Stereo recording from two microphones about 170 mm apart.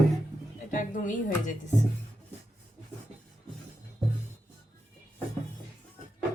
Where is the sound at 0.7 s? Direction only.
50° left (ahead or behind).